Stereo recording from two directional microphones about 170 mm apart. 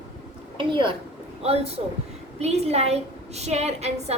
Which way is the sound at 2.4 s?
40° right (ahead or behind).